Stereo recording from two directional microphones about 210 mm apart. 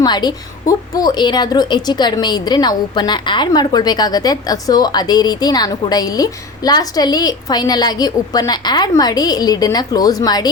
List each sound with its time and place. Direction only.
0.0 s a woman's voice: 20° left (ahead or behind)